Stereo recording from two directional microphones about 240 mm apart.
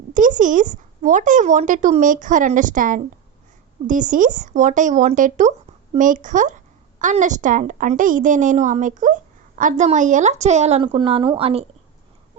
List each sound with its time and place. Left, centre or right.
0.1 s a woman's voice: right